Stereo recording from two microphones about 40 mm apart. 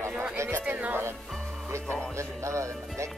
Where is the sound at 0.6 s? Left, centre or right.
Right.